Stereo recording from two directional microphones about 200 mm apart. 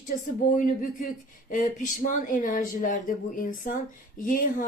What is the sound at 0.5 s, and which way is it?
Speech, 40° left (ahead or behind).